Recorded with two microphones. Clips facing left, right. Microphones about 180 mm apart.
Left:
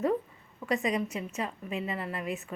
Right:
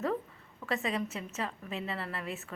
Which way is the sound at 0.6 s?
15° left (ahead or behind).